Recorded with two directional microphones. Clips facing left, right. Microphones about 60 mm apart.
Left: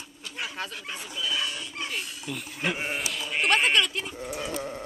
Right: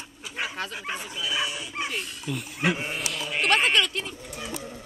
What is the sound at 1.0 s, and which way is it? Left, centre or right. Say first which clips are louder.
Speech: even; centre.